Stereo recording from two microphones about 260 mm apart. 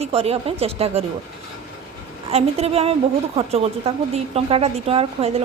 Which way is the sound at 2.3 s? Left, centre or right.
Right.